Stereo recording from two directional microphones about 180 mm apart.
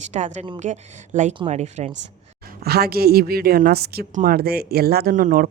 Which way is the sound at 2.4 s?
60° right (ahead or behind).